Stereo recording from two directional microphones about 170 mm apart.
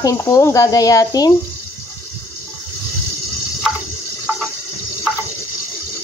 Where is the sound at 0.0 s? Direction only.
20° left (ahead or behind).